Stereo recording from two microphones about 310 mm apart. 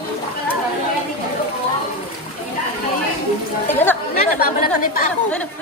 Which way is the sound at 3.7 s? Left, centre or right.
Centre.